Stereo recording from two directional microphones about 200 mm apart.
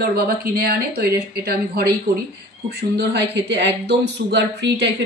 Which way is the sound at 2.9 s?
60° right (ahead or behind).